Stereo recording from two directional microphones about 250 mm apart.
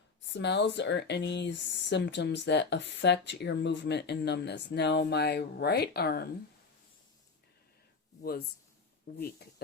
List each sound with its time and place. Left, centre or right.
0.3 s speech: left
8.2 s speech: left